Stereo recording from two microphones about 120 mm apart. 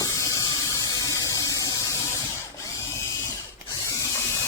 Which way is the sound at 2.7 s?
25° left (ahead or behind).